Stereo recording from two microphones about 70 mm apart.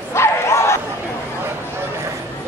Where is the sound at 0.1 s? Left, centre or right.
Left.